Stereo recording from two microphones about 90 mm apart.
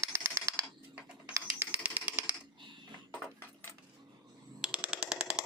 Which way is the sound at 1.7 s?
20° right (ahead or behind).